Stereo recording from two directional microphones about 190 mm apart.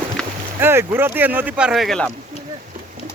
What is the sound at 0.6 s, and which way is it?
Speech, 10° right (ahead or behind).